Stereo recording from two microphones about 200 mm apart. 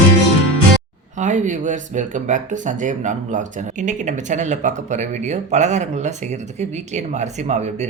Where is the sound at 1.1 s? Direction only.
40° right (ahead or behind).